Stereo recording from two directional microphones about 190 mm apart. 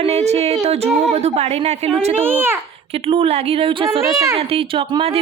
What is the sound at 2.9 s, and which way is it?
Speech, 30° right (ahead or behind).